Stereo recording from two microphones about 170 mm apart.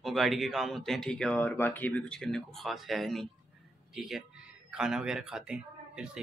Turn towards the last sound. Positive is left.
turn(degrees=-5)  # may be behind; listen again after turning